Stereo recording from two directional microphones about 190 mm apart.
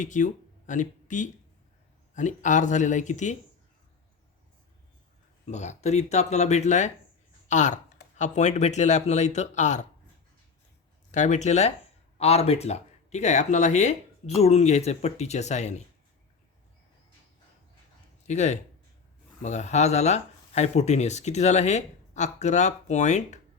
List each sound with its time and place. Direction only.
0.0 s speech: 40° left (ahead or behind)
5.5 s speech: 35° left (ahead or behind)
11.1 s speech: 40° left (ahead or behind)
18.3 s speech: 35° left (ahead or behind)